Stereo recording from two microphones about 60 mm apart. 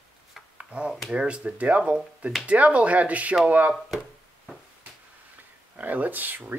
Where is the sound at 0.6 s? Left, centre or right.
Centre.